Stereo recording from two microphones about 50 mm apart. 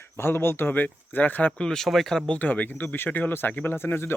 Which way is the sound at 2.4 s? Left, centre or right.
Left.